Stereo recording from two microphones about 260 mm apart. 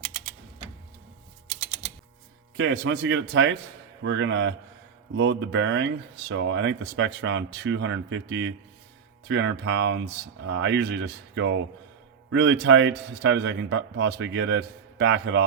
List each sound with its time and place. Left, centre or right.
2.6 s speech: right